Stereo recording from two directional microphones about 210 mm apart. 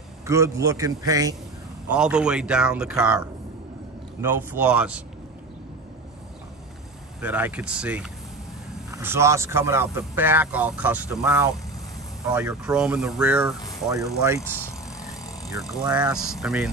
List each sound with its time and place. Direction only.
0.3 s speech: 15° right (ahead or behind)
1.9 s speech: 5° right (ahead or behind)
7.2 s speech: 10° right (ahead or behind)
15.5 s speech: centre (ahead or behind)